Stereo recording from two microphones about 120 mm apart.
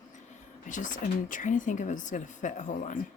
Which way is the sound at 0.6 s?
90° left.